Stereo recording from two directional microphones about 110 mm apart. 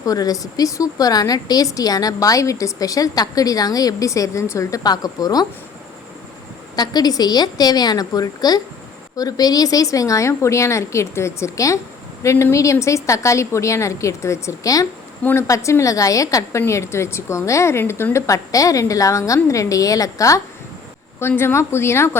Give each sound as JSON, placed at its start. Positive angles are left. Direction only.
{"t": 0.0, "sound": "a woman's voice", "side_deg": 35}
{"t": 6.7, "sound": "a woman's voice", "side_deg": 35}
{"t": 15.2, "sound": "a woman's voice", "side_deg": 20}